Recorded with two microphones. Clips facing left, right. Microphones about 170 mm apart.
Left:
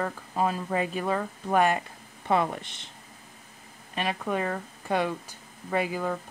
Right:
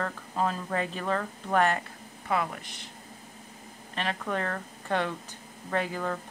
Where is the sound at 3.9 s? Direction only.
10° left (ahead or behind).